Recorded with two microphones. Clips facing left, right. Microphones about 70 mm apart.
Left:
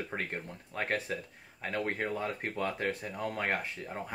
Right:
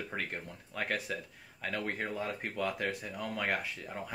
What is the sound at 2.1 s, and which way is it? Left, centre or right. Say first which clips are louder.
Speech: left 2 dB; left.